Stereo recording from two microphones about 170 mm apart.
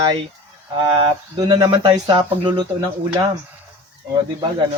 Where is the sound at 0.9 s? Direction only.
30° right (ahead or behind).